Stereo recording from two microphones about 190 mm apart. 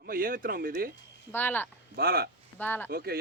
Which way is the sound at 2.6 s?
10° left (ahead or behind).